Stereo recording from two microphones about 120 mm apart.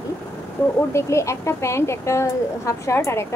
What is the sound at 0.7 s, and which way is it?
Speech, 20° left (ahead or behind).